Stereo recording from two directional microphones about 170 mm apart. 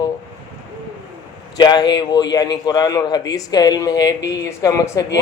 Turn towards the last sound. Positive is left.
turn(degrees=20)  # may be behind; listen again after turning